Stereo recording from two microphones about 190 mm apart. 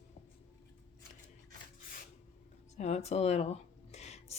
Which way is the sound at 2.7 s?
35° left (ahead or behind).